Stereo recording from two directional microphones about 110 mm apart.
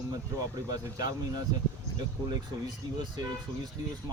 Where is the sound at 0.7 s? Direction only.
40° right (ahead or behind).